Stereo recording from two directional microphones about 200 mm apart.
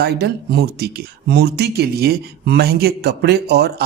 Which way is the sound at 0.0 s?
55° right (ahead or behind).